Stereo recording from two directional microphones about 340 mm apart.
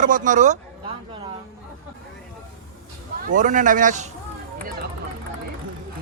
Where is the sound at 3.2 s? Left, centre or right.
Right.